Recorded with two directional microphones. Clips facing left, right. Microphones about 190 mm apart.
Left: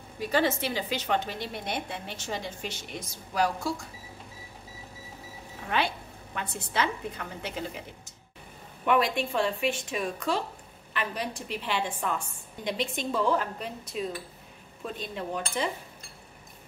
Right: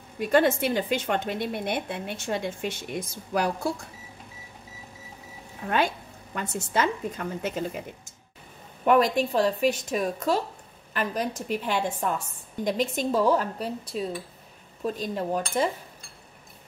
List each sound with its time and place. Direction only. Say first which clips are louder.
0.3 s a woman's voice: right 5 dB; 55° right (ahead or behind)
5.7 s a woman's voice: right 4 dB; 45° right (ahead or behind)
8.8 s a woman's voice: right 5 dB; 40° right (ahead or behind)